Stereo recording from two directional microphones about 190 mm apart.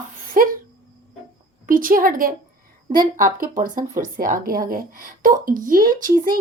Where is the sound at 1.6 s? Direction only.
45° right (ahead or behind).